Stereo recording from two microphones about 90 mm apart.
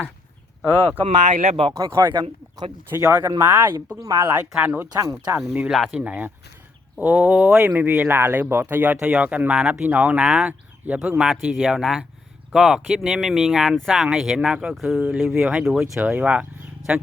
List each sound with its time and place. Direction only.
0.9 s speech: 80° right
2.0 s speech: 55° right (ahead or behind)
3.1 s speech: 25° right (ahead or behind)
4.9 s speech: 35° right (ahead or behind)
5.4 s speech: 5° right (ahead or behind)
6.0 s speech: 20° right (ahead or behind)
16.0 s speech: 15° right (ahead or behind)